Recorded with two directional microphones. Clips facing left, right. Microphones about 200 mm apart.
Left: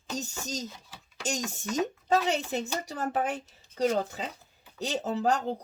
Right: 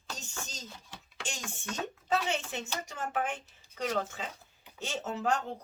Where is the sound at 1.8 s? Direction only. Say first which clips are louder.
Left 5 dB; 35° left (ahead or behind).